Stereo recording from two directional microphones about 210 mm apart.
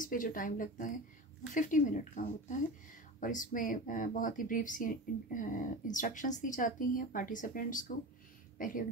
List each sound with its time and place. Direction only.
0.0 s speech: 40° left (ahead or behind)